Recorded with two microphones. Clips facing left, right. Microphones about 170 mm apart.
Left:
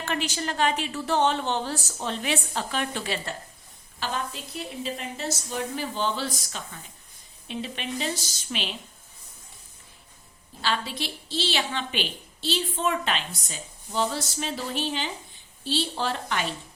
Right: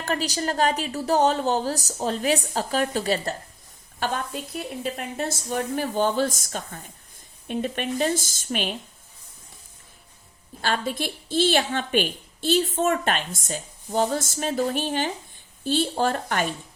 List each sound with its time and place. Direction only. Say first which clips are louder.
0.0 s a woman's voice: right 3 dB; 40° right (ahead or behind)
4.0 s a woman's voice: right 4 dB; 50° right (ahead or behind)
10.6 s a woman's voice: right 3 dB; 50° right (ahead or behind)